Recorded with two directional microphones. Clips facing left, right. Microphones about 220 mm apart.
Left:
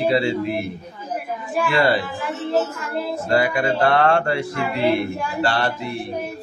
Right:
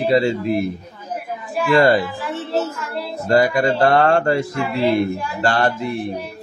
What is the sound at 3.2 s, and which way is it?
Speech, 40° right (ahead or behind).